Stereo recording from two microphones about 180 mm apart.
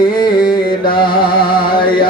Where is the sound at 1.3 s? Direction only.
55° left (ahead or behind).